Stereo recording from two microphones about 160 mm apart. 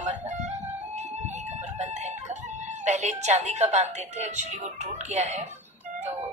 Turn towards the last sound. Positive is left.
turn(degrees=-45)  # may be behind; listen again after turning